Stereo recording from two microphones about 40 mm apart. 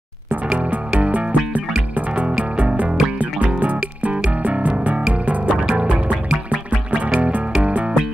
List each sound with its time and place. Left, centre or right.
0.6 s music: right